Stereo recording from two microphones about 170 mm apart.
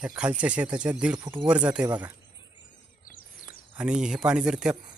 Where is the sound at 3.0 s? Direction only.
55° left (ahead or behind).